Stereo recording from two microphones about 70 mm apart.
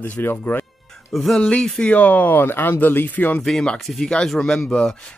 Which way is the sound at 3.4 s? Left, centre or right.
Centre.